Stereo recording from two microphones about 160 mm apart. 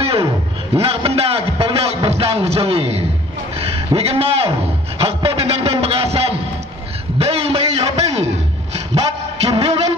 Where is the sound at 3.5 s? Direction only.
40° right (ahead or behind).